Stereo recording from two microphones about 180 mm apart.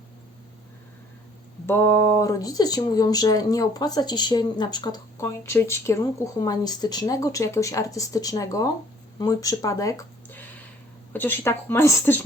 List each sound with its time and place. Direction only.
1.6 s a woman's voice: 10° left (ahead or behind)